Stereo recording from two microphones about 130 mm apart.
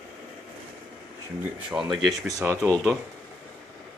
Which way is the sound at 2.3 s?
25° right (ahead or behind).